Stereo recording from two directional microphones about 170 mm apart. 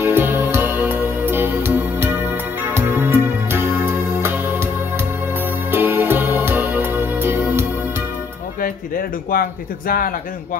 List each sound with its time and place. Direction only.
0.0 s music: 10° right (ahead or behind)
8.5 s speech: 60° left (ahead or behind)